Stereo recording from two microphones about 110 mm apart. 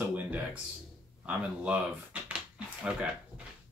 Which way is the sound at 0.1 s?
15° right (ahead or behind).